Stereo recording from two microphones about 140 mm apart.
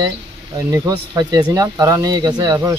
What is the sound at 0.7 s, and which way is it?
Speech, 25° right (ahead or behind).